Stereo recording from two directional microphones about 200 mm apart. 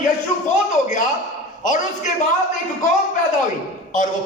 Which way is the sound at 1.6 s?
40° left (ahead or behind).